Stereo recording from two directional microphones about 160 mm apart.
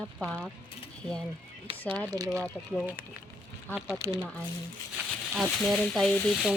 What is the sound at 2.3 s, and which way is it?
Speech, centre (ahead or behind).